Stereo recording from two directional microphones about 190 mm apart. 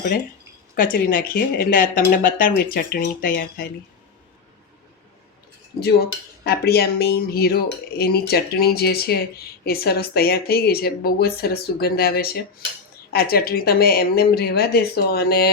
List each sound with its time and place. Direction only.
0.8 s speech: 50° left (ahead or behind)
5.8 s cutlery: 55° left (ahead or behind)
9.6 s speech: 55° left (ahead or behind)